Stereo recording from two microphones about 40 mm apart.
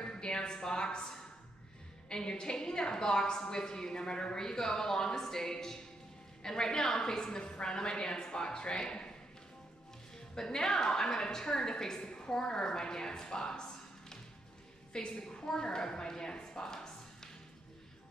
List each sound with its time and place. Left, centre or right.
0.0 s a sound: left
2.0 s a woman's voice: left
10.3 s a woman's voice: centre